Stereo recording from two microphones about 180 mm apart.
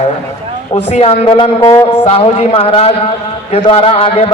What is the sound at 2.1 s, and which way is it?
A man's voice, 30° left (ahead or behind).